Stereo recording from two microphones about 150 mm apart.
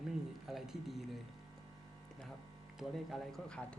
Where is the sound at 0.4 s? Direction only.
Centre (ahead or behind).